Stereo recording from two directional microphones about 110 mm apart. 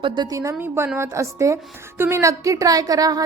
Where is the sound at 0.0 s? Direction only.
45° right (ahead or behind).